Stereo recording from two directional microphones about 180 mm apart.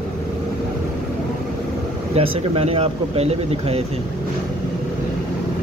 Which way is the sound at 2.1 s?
35° right (ahead or behind).